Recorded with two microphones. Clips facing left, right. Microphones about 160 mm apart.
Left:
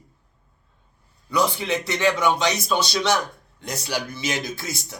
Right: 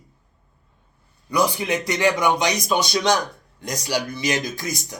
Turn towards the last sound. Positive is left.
turn(degrees=-15)  # may be behind; listen again after turning